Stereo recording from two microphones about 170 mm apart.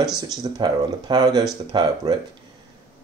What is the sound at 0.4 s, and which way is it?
Speech, 25° right (ahead or behind).